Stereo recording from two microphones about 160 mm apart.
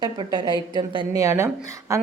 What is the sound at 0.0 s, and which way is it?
Speech, 25° right (ahead or behind).